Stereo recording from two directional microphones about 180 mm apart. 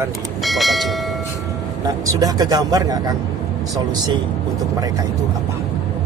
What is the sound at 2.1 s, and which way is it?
Speech, 20° right (ahead or behind).